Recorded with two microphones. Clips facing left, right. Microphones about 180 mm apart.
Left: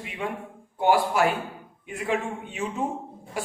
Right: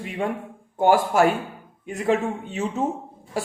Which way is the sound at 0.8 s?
45° right (ahead or behind).